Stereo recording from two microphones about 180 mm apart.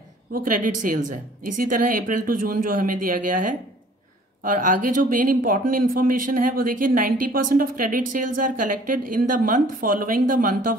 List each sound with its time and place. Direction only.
0.3 s speech: 50° right (ahead or behind)